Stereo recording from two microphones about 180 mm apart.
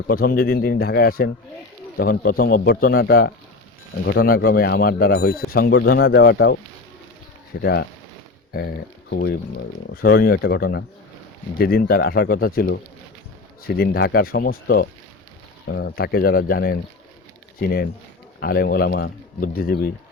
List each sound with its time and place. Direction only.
0.1 s speech: 55° left (ahead or behind)
7.6 s speech: 65° left (ahead or behind)
11.5 s speech: 55° left (ahead or behind)